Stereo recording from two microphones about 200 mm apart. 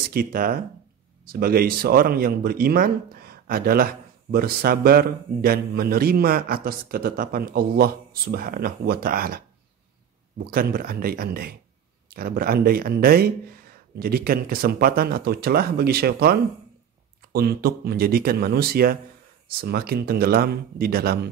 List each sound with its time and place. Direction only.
0.1 s speech: 45° right (ahead or behind)
10.4 s speech: 50° right (ahead or behind)